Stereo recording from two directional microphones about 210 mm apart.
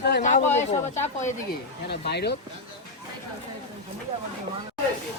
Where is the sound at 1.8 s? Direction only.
50° left (ahead or behind).